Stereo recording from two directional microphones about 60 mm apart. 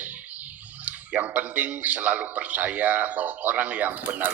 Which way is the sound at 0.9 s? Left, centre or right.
Right.